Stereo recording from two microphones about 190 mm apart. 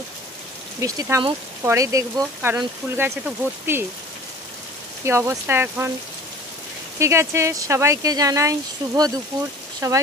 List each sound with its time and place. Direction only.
0.7 s speech: 15° right (ahead or behind)
5.0 s speech: 15° right (ahead or behind)
7.0 s speech: 15° right (ahead or behind)